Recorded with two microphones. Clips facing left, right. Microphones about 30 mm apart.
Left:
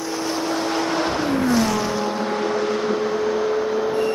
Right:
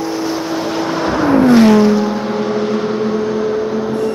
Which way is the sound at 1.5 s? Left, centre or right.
Right.